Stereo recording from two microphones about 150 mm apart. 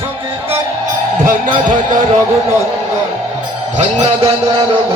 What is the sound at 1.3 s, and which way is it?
Speech, 60° right (ahead or behind).